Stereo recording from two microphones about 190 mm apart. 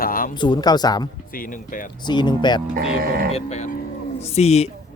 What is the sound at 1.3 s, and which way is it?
Speech, 45° left (ahead or behind).